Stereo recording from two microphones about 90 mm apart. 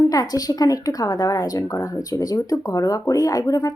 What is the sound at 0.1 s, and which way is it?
A woman's voice, 45° left (ahead or behind).